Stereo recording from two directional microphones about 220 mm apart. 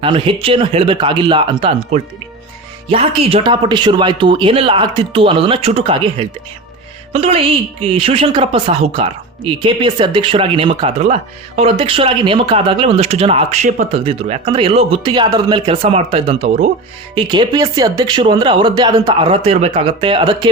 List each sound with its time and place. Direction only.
0.0 s a woman's voice: 25° right (ahead or behind)